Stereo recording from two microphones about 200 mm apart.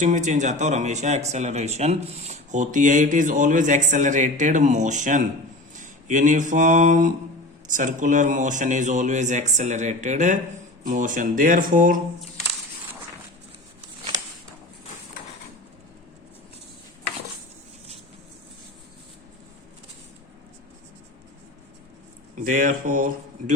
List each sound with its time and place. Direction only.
0.0 s speech: 35° right (ahead or behind)
5.7 s a sound: 40° right (ahead or behind)
7.7 s speech: 40° right (ahead or behind)
22.4 s speech: 40° right (ahead or behind)